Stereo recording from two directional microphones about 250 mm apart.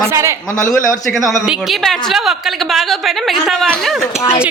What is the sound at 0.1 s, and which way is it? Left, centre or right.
Speech, centre.